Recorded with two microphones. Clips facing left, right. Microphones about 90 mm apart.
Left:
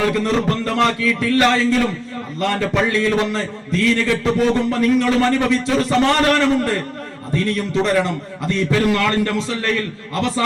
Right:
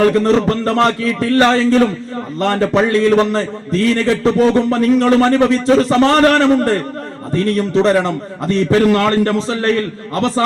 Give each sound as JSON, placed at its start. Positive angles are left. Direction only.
{"t": 0.0, "sound": "a man's voice", "side_deg": -40}